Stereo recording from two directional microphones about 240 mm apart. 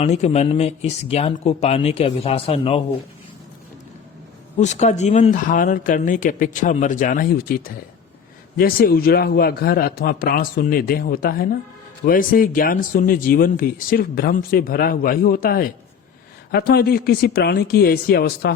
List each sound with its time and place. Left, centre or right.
0.0 s speech: left
4.6 s speech: left